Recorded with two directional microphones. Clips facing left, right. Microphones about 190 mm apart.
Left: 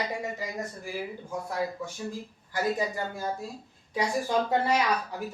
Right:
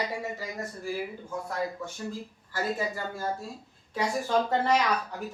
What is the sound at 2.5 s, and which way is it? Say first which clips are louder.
A woman's voice: left 2 dB; 15° left (ahead or behind).